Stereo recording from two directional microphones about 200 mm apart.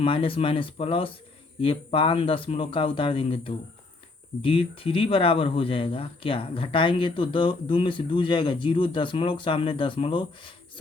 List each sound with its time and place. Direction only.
0.0 s speech: 25° left (ahead or behind)